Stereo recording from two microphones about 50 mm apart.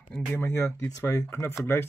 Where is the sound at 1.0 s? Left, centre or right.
Left.